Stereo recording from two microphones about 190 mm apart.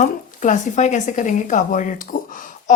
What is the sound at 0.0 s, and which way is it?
Speech, 40° left (ahead or behind).